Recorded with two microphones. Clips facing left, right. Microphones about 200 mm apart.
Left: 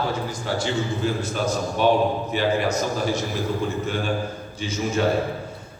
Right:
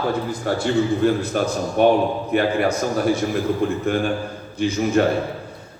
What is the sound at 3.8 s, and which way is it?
A man's voice, 55° right (ahead or behind).